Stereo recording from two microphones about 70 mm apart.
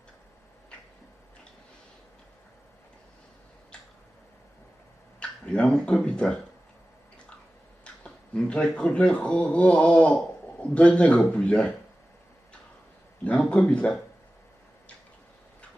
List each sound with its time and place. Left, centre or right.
5.2 s speech: centre
8.0 s a sound: centre
8.6 s a man's voice: centre
13.2 s a man's voice: centre